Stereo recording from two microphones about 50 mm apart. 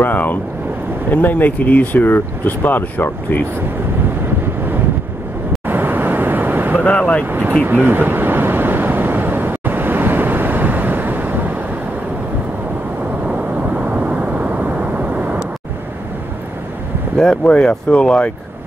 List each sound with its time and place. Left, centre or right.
0.0 s speech: left
5.7 s vehicle: right
6.8 s vehicle: left
7.2 s speech: right
7.6 s a sound: right
13.3 s vehicle: right
17.5 s speech: centre